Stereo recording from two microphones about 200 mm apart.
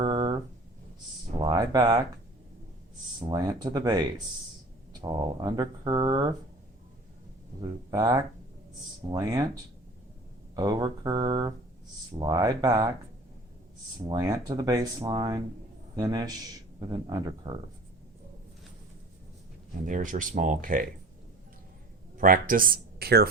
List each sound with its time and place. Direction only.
0.0 s a sound: 20° right (ahead or behind)
1.4 s a sound: 20° right (ahead or behind)
3.2 s speech: 20° right (ahead or behind)
7.6 s speech: 20° right (ahead or behind)
10.5 s speech: 20° right (ahead or behind)
14.1 s speech: 20° right (ahead or behind)
19.8 s speech: 40° right (ahead or behind)
22.2 s speech: 45° right (ahead or behind)